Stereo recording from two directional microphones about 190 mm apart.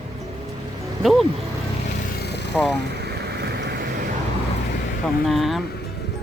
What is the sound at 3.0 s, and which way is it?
Vehicle, 60° right (ahead or behind).